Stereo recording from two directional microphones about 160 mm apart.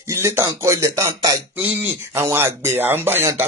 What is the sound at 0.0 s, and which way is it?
Speech, 15° right (ahead or behind).